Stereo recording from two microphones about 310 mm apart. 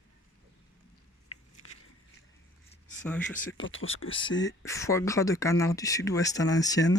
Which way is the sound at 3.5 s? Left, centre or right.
Left.